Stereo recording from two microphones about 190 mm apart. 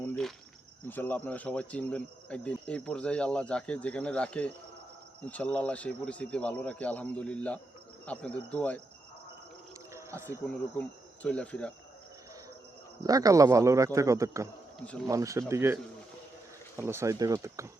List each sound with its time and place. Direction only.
0.0 s cricket: 5° left (ahead or behind)
0.9 s speech: 10° left (ahead or behind)
9.9 s a sound: 15° right (ahead or behind)
10.4 s speech: 5° left (ahead or behind)
13.0 s speech: 20° right (ahead or behind)